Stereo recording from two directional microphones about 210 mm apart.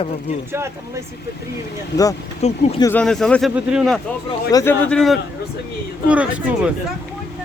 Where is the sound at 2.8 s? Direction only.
5° left (ahead or behind).